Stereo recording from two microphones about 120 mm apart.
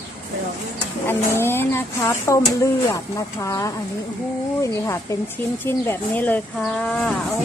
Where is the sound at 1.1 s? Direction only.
20° left (ahead or behind).